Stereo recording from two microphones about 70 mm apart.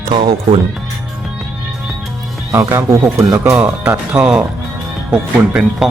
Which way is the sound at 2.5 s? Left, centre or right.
Right.